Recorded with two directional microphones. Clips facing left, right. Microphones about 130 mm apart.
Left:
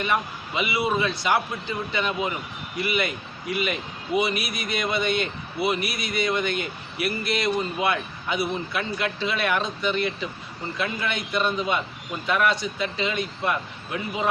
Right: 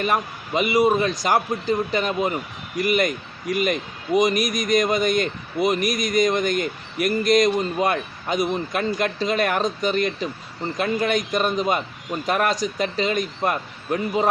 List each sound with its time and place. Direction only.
0.0 s a man's voice: 40° right (ahead or behind)